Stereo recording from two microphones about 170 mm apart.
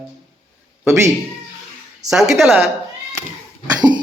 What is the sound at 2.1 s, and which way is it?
Speech, centre (ahead or behind).